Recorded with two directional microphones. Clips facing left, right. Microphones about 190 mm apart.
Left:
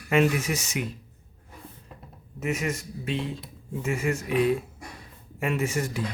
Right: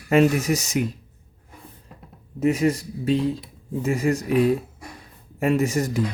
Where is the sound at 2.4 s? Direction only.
35° right (ahead or behind).